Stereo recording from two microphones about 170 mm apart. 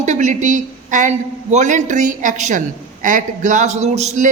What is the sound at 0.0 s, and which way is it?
A man's voice, 45° right (ahead or behind).